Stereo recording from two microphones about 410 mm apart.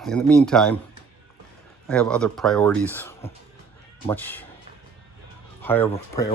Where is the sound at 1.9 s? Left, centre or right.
Centre.